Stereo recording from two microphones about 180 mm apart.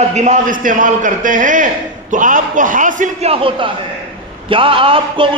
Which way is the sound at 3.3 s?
30° right (ahead or behind).